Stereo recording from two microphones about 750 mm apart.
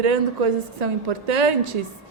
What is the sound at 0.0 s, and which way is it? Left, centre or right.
A woman's voice, right.